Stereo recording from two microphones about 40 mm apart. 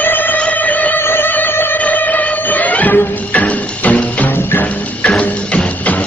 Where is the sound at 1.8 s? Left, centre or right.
Left.